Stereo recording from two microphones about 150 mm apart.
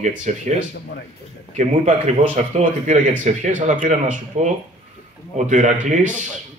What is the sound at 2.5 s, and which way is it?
A man's voice, 50° right (ahead or behind).